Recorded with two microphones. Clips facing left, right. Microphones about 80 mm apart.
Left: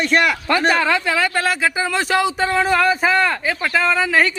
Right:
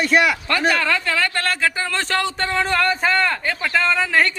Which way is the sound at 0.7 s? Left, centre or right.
Centre.